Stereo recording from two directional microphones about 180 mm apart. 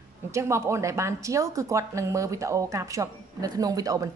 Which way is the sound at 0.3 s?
15° right (ahead or behind).